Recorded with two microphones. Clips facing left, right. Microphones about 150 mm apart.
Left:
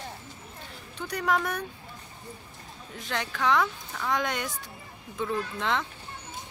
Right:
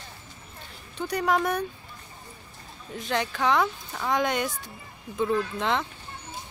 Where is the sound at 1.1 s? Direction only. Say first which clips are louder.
Right 3 dB; 20° right (ahead or behind).